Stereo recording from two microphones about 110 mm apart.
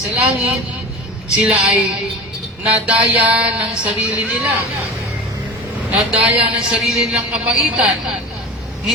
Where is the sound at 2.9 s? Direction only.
10° right (ahead or behind).